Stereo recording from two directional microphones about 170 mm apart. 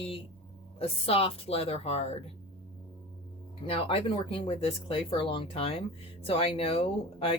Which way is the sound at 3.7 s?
35° left (ahead or behind).